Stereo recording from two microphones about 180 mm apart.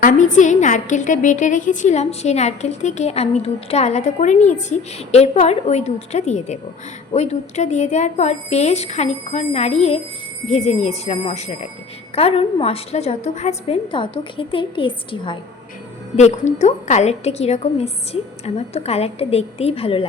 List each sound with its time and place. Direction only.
0.0 s a woman's voice: 45° left (ahead or behind); by 15.4 s 30° left (ahead or behind)
16.1 s a woman's voice: 40° left (ahead or behind)